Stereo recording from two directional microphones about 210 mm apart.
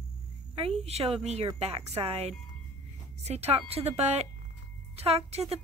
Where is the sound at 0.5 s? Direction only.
30° right (ahead or behind).